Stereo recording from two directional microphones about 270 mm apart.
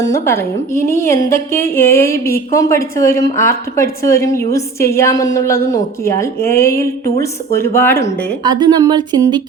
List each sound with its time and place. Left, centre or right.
0.0 s a woman's voice: centre
6.7 s speech: left
7.0 s a woman's voice: centre
8.4 s speech: centre